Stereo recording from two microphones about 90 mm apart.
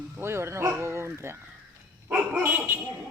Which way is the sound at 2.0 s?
10° right (ahead or behind).